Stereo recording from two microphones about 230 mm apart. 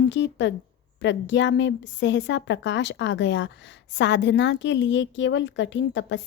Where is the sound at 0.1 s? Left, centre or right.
Left.